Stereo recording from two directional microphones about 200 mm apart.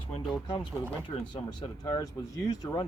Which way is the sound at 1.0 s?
20° left (ahead or behind).